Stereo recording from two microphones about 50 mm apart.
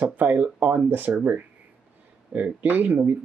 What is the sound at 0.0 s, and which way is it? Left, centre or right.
Speech, right.